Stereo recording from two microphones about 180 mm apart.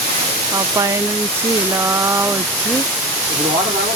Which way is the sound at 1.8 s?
15° right (ahead or behind).